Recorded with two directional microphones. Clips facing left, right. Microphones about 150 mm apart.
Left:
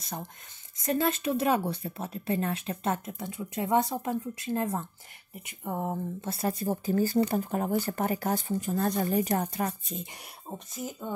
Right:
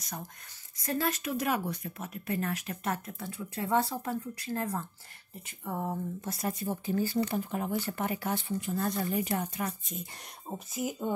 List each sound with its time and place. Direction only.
0.0 s speech: 25° left (ahead or behind)
10.5 s speech: 10° right (ahead or behind)